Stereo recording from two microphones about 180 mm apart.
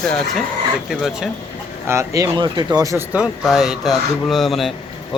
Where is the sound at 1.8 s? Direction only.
15° right (ahead or behind).